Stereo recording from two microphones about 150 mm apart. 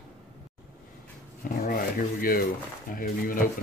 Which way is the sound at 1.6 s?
70° left (ahead or behind).